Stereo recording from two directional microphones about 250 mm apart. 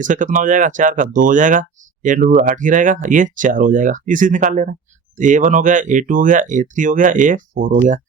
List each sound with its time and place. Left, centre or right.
0.0 s speech: right